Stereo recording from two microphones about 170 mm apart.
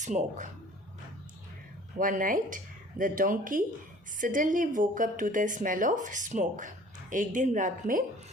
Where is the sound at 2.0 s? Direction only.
50° right (ahead or behind).